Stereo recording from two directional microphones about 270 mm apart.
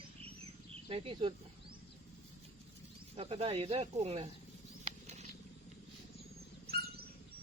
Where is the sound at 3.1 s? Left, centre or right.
Right.